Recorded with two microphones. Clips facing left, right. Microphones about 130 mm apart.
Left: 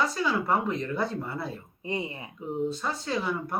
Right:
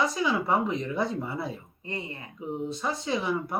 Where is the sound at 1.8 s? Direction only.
15° left (ahead or behind).